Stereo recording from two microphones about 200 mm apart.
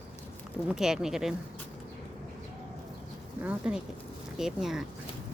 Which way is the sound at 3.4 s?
5° right (ahead or behind).